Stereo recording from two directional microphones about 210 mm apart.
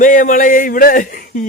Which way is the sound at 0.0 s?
40° left (ahead or behind).